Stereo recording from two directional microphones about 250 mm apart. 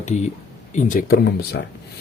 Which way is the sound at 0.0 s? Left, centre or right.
Left.